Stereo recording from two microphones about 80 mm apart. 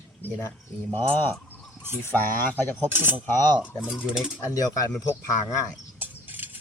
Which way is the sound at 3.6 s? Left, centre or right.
Centre.